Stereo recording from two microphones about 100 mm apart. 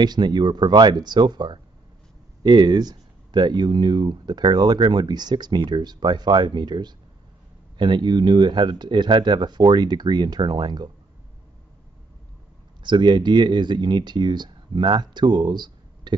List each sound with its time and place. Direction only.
0.0 s speech: 45° right (ahead or behind)
12.8 s speech: 50° right (ahead or behind)